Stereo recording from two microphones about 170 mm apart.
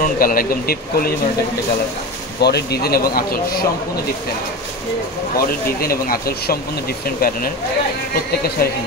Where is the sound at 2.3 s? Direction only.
75° left (ahead or behind).